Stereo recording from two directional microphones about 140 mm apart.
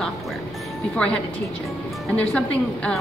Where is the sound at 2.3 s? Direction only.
10° left (ahead or behind).